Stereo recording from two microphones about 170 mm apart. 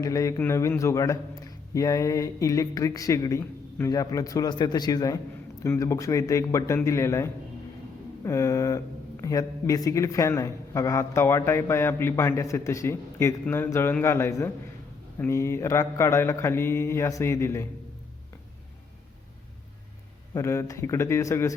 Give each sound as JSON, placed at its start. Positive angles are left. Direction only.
{"t": 0.0, "sound": "speech", "side_deg": 20}
{"t": 20.3, "sound": "speech", "side_deg": 15}